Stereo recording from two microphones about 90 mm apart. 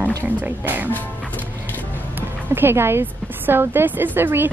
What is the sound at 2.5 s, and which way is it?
Speech, 25° right (ahead or behind).